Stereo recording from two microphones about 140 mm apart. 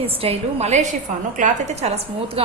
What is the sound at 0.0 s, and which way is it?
A woman's voice, 45° right (ahead or behind).